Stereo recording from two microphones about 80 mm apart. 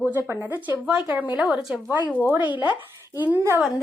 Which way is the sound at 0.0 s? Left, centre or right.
Right.